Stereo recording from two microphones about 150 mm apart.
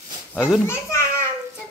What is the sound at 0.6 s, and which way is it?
Speech, 15° left (ahead or behind).